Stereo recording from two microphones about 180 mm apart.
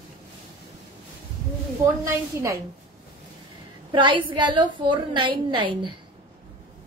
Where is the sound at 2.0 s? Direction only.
15° right (ahead or behind).